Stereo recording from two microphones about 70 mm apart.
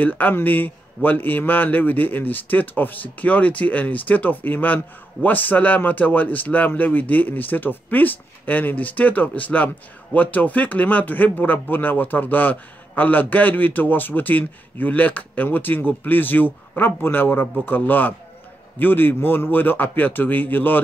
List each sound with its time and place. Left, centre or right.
0.0 s a man's voice: left